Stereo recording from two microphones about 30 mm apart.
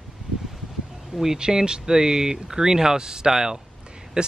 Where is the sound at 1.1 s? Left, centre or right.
Centre.